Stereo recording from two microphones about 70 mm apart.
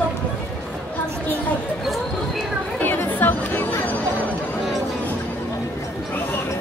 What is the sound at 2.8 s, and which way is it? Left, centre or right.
Chatter, left.